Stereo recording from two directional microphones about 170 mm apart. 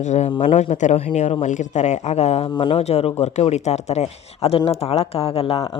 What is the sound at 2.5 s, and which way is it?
A woman's voice, 30° left (ahead or behind).